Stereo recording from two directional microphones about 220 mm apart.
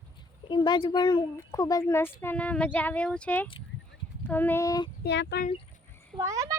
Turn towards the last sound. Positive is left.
turn(degrees=-15)  # may be behind; listen again after turning